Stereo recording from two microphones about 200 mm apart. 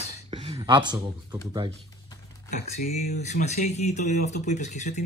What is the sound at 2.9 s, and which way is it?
Speech, 35° left (ahead or behind).